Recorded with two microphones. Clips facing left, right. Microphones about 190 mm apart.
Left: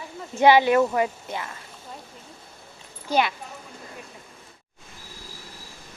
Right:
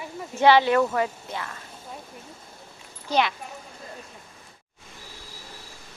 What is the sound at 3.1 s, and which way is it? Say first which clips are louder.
Speech: left 1 dB; 5° left (ahead or behind).